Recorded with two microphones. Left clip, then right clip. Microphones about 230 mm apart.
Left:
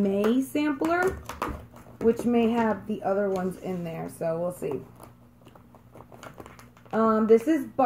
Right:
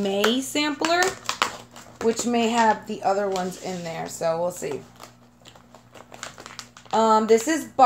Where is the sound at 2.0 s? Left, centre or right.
Right.